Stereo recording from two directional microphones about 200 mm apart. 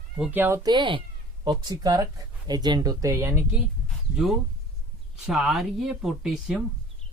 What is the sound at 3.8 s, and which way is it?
Speech, centre (ahead or behind).